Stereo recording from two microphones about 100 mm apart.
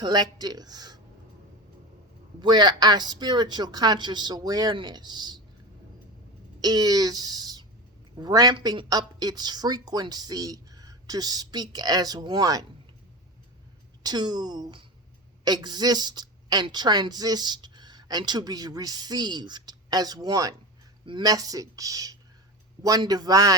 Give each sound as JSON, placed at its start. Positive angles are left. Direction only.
{"t": 0.0, "sound": "speech", "side_deg": -45}
{"t": 2.4, "sound": "speech", "side_deg": -45}
{"t": 6.6, "sound": "speech", "side_deg": -40}
{"t": 14.0, "sound": "a woman's voice", "side_deg": -45}
{"t": 21.0, "sound": "speech", "side_deg": -55}
{"t": 21.2, "sound": "speech", "side_deg": -40}